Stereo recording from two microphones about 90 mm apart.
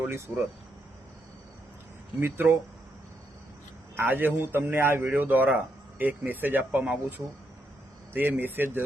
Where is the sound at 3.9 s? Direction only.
20° right (ahead or behind).